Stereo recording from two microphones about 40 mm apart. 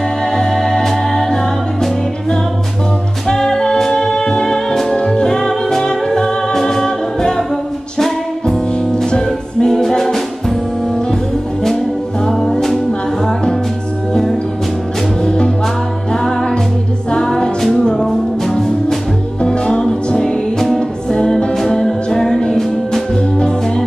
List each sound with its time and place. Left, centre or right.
0.4 s music: centre
3.3 s music: centre
8.9 s music: centre
12.3 s music: centre
15.2 s music: left; by 18.9 s centre
19.4 s music: left